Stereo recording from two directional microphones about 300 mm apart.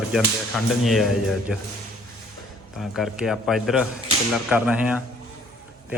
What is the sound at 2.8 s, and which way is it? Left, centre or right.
Speech, centre.